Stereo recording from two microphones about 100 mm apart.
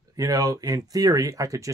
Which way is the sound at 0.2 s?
35° right (ahead or behind).